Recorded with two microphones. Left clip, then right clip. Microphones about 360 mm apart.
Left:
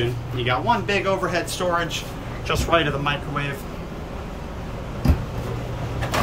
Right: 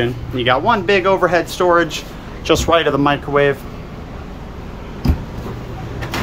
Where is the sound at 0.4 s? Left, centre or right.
Centre.